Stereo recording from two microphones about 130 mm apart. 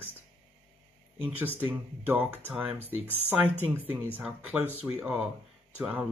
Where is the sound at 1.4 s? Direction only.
15° right (ahead or behind).